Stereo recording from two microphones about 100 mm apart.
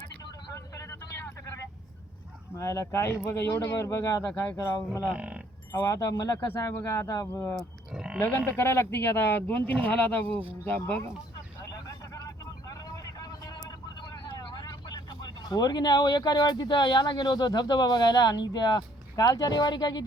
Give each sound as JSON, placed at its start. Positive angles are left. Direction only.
{"t": 0.5, "sound": "vehicle", "side_deg": 30}
{"t": 2.6, "sound": "speech", "side_deg": 30}
{"t": 4.9, "sound": "speech", "side_deg": -10}
{"t": 5.7, "sound": "speech", "side_deg": 30}
{"t": 7.9, "sound": "pig", "side_deg": -10}
{"t": 8.4, "sound": "speech", "side_deg": 25}
{"t": 11.6, "sound": "vehicle", "side_deg": 35}
{"t": 13.1, "sound": "speech", "side_deg": 40}